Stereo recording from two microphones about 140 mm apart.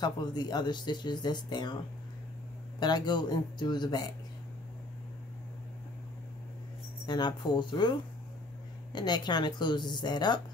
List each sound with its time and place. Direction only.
0.0 s speech: 30° left (ahead or behind)
2.8 s speech: 30° left (ahead or behind)
7.1 s speech: 30° left (ahead or behind)
8.9 s speech: 30° left (ahead or behind)